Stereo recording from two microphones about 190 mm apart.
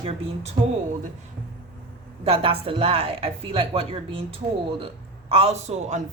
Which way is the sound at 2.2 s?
30° right (ahead or behind).